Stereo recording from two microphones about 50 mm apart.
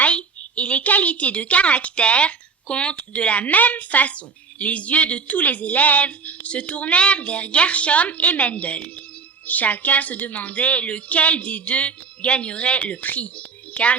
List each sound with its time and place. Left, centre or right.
0.0 s a woman's voice: left